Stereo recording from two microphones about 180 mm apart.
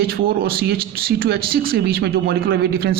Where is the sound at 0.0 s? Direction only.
60° right (ahead or behind).